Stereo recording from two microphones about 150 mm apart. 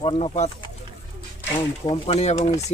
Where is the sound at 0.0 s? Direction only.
45° left (ahead or behind).